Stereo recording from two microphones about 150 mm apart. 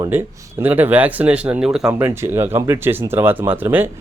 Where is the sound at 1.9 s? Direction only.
15° right (ahead or behind).